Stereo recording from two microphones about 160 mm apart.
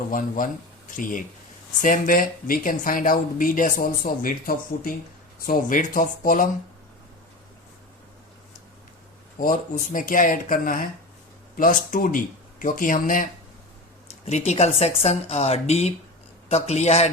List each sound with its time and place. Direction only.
0.1 s speech: 55° left (ahead or behind)
9.4 s speech: 60° left (ahead or behind)
14.3 s a man's voice: 45° left (ahead or behind)